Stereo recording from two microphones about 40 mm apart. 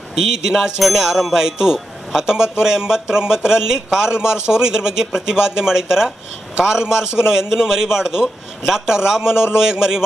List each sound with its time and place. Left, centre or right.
0.3 s a man's voice: centre
0.8 s a sound: centre
1.1 s a man's voice: centre